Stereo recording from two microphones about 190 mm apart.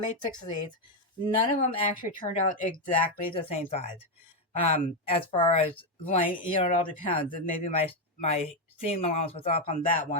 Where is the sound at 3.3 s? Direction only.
30° left (ahead or behind).